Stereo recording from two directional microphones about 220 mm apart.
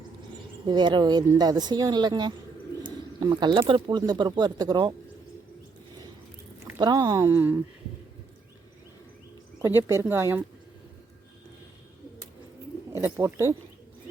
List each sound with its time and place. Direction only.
0.6 s speech: 20° right (ahead or behind)
6.7 s speech: 20° right (ahead or behind)
9.6 s speech: 10° right (ahead or behind)
13.0 s speech: 10° right (ahead or behind)